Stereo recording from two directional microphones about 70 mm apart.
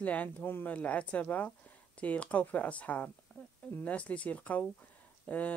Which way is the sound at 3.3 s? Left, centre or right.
Centre.